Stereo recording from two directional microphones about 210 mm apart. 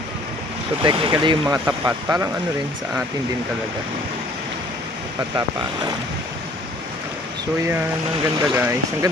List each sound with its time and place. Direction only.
0.8 s speech: 25° right (ahead or behind)
8.4 s speech: 10° right (ahead or behind)